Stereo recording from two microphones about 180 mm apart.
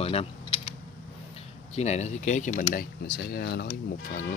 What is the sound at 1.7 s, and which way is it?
Speech, 40° left (ahead or behind).